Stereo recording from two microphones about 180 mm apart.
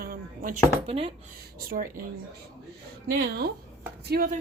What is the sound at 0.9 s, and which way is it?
Speech, 30° right (ahead or behind).